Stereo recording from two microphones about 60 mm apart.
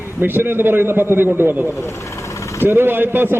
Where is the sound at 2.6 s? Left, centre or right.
Right.